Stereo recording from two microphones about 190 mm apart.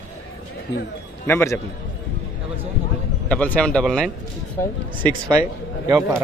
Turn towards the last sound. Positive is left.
turn(degrees=-15)  # may be behind; listen again after turning